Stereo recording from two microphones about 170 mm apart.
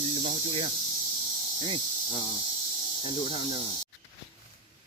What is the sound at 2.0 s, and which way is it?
Speech, 35° left (ahead or behind).